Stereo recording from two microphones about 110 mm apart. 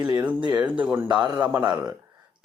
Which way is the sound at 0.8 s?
20° right (ahead or behind).